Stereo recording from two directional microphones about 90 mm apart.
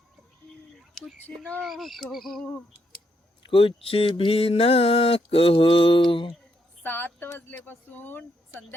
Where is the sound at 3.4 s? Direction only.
85° left.